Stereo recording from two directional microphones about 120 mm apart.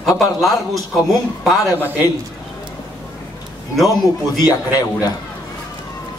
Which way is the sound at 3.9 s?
30° left (ahead or behind).